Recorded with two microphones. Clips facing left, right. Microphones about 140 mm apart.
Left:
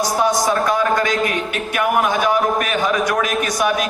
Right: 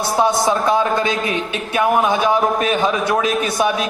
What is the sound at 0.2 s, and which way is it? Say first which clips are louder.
A man's voice: right 2 dB; 25° right (ahead or behind).